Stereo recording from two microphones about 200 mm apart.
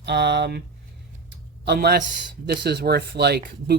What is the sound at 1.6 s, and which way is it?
Speech, 50° right (ahead or behind).